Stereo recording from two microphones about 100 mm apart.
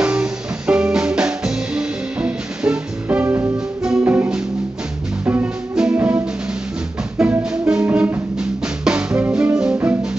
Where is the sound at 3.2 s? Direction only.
20° right (ahead or behind).